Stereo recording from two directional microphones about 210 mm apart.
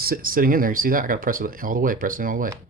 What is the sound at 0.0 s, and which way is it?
Speech, 45° right (ahead or behind).